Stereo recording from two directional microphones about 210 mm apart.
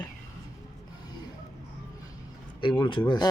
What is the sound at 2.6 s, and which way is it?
Speech, 20° left (ahead or behind).